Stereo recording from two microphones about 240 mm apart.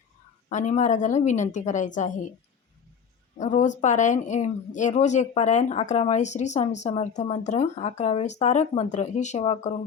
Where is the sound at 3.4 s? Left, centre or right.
Left.